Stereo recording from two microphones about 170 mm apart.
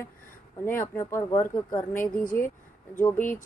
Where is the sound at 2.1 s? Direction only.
55° left (ahead or behind).